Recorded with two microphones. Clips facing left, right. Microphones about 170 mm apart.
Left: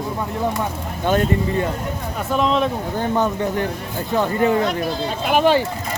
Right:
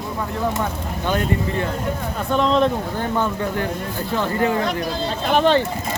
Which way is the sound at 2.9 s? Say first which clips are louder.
Left 2 dB; 15° left (ahead or behind).